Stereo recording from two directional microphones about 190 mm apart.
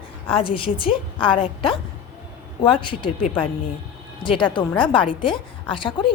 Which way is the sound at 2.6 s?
25° left (ahead or behind).